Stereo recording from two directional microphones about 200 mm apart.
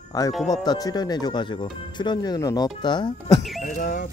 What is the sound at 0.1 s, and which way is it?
Speech, 20° left (ahead or behind).